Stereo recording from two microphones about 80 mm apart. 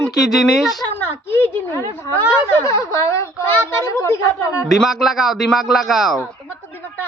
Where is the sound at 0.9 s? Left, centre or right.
Left.